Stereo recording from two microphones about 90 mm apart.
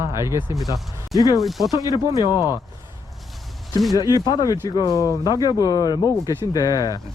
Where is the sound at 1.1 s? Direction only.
40° left (ahead or behind).